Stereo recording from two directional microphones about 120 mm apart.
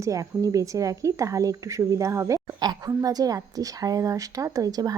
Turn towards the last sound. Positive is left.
turn(degrees=-30)  # may be behind; listen again after turning